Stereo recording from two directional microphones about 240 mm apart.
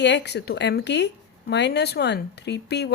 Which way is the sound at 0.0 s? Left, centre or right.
Left.